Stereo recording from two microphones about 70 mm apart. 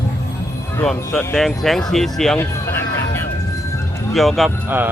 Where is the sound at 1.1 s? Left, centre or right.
Left.